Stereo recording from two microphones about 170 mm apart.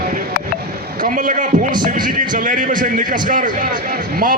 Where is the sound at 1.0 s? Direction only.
50° right (ahead or behind).